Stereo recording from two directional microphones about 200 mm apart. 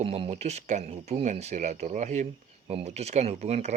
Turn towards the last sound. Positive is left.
turn(degrees=-35)  # may be behind; listen again after turning